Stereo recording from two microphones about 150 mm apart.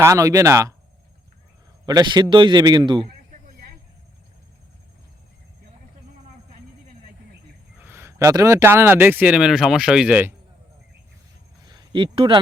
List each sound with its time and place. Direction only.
0.0 s a man's voice: 20° right (ahead or behind)
1.9 s a man's voice: 25° right (ahead or behind)
7.8 s speech: 15° right (ahead or behind)
11.7 s speech: 30° right (ahead or behind)